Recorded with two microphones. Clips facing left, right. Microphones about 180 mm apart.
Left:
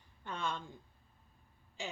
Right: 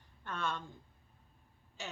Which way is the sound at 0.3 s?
15° left (ahead or behind).